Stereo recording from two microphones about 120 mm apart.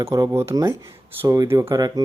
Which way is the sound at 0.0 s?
25° right (ahead or behind).